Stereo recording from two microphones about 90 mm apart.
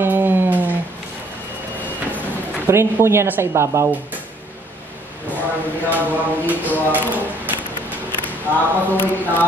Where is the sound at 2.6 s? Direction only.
30° right (ahead or behind).